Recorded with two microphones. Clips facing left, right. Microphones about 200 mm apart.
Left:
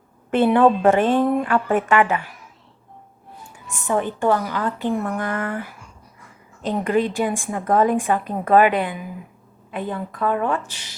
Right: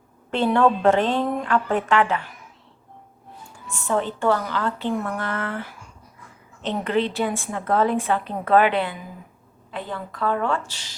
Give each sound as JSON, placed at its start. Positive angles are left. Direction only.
{"t": 0.3, "sound": "a woman's voice", "side_deg": 15}
{"t": 3.7, "sound": "a woman's voice", "side_deg": 15}